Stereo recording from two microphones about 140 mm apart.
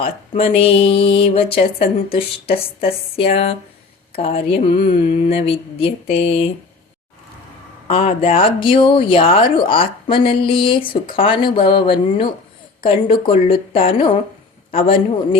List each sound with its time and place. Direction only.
0.0 s speech: 45° left (ahead or behind)
7.9 s speech: 45° left (ahead or behind)